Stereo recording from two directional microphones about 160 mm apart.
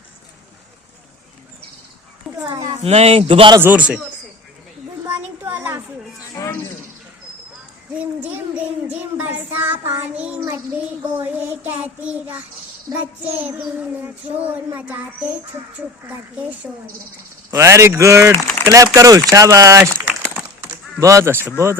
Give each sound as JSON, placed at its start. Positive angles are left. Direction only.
{"t": 2.3, "sound": "a sound", "side_deg": 0}
{"t": 2.6, "sound": "speech", "side_deg": -45}
{"t": 3.6, "sound": "speech", "side_deg": -10}
{"t": 5.0, "sound": "a sound", "side_deg": -15}
{"t": 6.4, "sound": "a sound", "side_deg": 20}
{"t": 7.9, "sound": "speech", "side_deg": -10}
{"t": 11.4, "sound": "speech", "side_deg": -10}
{"t": 14.0, "sound": "speech", "side_deg": -10}
{"t": 21.0, "sound": "speech", "side_deg": -20}